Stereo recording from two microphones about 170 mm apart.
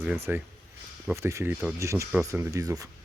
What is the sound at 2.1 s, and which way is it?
Speech, 5° right (ahead or behind).